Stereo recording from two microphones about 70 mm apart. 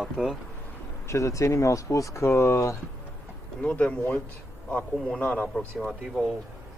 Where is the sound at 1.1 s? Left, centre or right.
Left.